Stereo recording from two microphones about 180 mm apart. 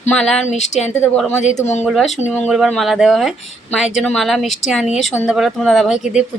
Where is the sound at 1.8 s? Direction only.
Centre (ahead or behind).